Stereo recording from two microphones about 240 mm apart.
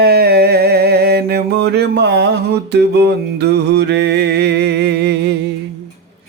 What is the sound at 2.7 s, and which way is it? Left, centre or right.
Music, right.